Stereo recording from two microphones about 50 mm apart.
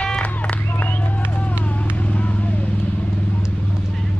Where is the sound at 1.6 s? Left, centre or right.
Left.